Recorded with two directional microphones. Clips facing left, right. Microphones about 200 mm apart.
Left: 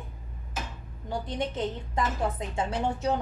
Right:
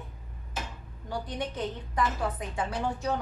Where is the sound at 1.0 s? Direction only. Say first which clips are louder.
Left 3 dB; 25° left (ahead or behind).